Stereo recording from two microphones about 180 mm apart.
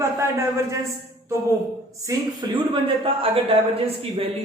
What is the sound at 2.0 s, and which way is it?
Speech, 25° right (ahead or behind).